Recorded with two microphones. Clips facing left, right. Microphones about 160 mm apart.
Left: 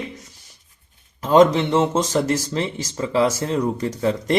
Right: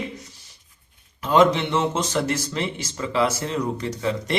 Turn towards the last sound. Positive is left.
turn(degrees=40)  # may be behind; listen again after turning